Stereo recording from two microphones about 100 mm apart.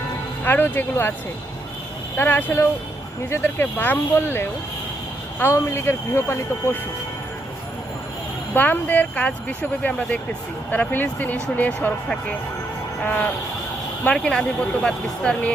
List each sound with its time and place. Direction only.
0.4 s speech: 20° left (ahead or behind)
2.1 s speech: 25° left (ahead or behind)
8.5 s speech: 20° left (ahead or behind)
13.0 s speech: 15° left (ahead or behind)